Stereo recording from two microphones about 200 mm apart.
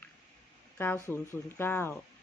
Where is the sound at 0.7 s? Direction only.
10° left (ahead or behind).